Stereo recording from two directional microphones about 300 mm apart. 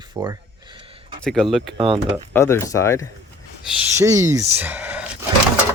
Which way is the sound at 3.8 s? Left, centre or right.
Centre.